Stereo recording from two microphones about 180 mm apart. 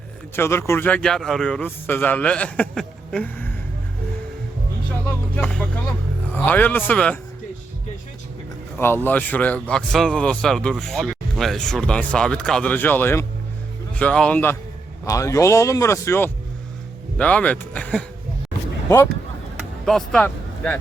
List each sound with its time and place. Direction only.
0.3 s a man's voice: 15° left (ahead or behind)
5.0 s vehicle: 5° left (ahead or behind)
6.3 s a man's voice: 10° left (ahead or behind)
9.0 s a man's voice: 10° left (ahead or behind)
15.0 s a man's voice: 20° left (ahead or behind)
19.5 s a sound: centre (ahead or behind)